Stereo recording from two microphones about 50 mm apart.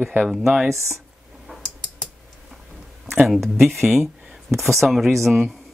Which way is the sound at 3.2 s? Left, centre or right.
Centre.